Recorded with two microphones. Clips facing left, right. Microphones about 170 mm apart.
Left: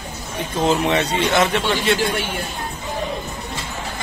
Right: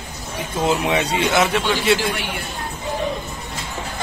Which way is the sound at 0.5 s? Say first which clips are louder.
Left 1 dB; 10° right (ahead or behind).